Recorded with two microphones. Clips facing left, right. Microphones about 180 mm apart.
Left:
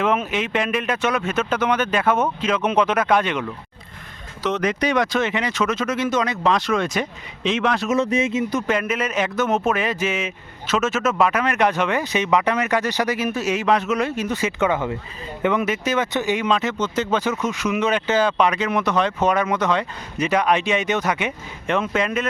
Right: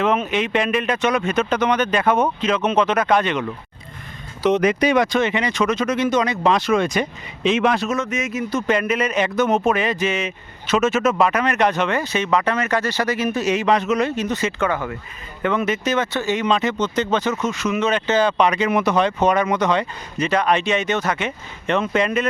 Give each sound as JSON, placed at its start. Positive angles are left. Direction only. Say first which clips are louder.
{"t": 0.0, "sound": "speech", "louder": "right 2 dB", "side_deg": 5}
{"t": 4.4, "sound": "speech", "louder": "right 5 dB", "side_deg": -10}
{"t": 7.9, "sound": "speech", "louder": "left 4 dB", "side_deg": 30}
{"t": 8.6, "sound": "speech", "louder": "right 3 dB", "side_deg": 5}